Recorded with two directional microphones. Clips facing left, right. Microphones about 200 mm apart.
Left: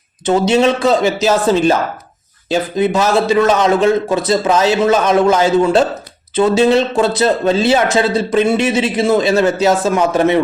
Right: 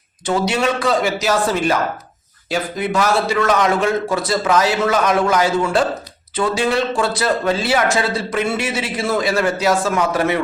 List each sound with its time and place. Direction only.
0.3 s speech: 20° left (ahead or behind)